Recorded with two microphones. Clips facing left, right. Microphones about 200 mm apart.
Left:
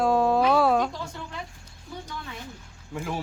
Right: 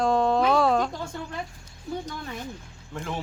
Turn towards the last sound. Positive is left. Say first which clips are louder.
# left 1 dB
turn(degrees=5)  # may be behind; listen again after turning